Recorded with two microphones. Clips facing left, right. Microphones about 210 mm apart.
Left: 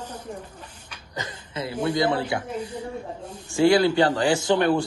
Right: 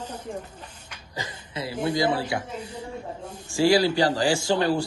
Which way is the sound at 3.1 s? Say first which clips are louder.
Even; 10° right (ahead or behind).